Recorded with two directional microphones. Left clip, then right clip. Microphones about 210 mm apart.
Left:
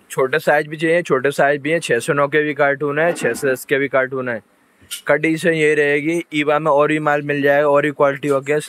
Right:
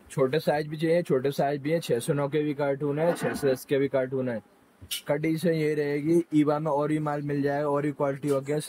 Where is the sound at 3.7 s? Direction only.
Centre (ahead or behind).